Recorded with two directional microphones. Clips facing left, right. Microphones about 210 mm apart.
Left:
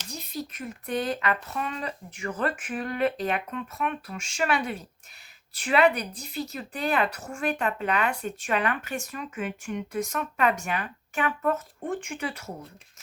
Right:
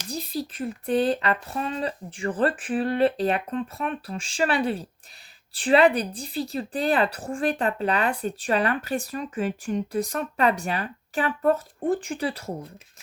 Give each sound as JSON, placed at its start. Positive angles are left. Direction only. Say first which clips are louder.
{"t": 0.1, "sound": "a woman's voice", "louder": "right 5 dB", "side_deg": -35}